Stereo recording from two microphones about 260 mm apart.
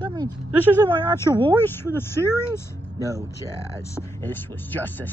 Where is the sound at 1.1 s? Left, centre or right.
Centre.